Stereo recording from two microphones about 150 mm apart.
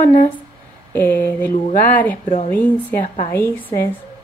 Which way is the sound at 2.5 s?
10° left (ahead or behind).